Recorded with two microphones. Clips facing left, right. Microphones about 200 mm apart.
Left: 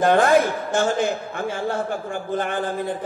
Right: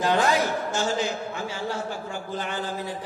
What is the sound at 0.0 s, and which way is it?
A man's voice, 55° left (ahead or behind).